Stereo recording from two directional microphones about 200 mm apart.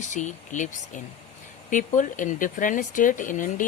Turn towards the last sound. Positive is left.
turn(degrees=40)  # may be behind; listen again after turning